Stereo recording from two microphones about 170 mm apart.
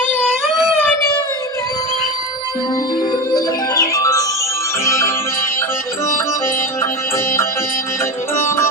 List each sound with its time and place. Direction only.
3.1 s music: 20° left (ahead or behind)
8.4 s music: 15° left (ahead or behind)